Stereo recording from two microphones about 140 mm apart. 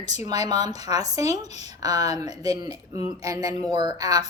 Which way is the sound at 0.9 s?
25° right (ahead or behind).